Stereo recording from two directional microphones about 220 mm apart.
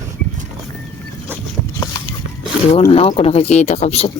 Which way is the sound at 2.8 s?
25° left (ahead or behind).